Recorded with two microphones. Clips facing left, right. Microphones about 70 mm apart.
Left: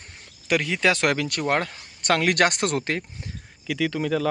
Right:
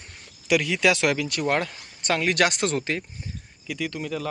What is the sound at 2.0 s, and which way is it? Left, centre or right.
Speech, left.